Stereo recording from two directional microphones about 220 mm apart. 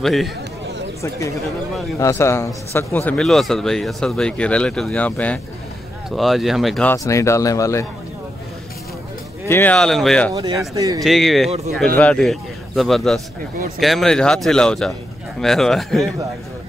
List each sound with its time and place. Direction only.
0.0 s speech: centre (ahead or behind)
2.0 s speech: 15° left (ahead or behind)
9.5 s speech: 10° left (ahead or behind)
10.7 s speech: 15° right (ahead or behind)
11.1 s speech: centre (ahead or behind)